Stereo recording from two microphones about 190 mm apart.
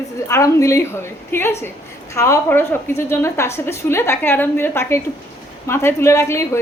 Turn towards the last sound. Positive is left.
turn(degrees=15)  # may be behind; listen again after turning